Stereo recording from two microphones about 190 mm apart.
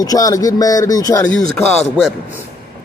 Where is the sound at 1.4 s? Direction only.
5° left (ahead or behind).